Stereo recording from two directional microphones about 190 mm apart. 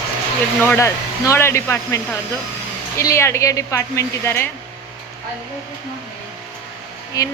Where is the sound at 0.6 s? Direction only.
15° left (ahead or behind).